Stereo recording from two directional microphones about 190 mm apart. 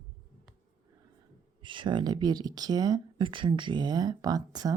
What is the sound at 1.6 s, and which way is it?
Speech, 25° right (ahead or behind).